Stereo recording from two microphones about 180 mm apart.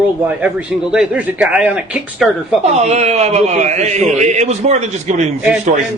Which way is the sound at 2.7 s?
40° right (ahead or behind).